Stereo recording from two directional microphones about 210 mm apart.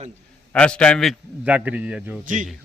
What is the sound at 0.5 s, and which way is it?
A man's voice, 5° left (ahead or behind).